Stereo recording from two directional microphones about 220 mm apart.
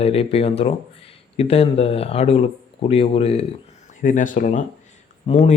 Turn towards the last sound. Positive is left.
turn(degrees=30)  # may be behind; listen again after turning